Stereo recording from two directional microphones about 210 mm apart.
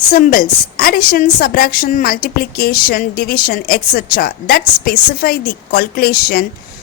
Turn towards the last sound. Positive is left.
turn(degrees=45)  # may be behind; listen again after turning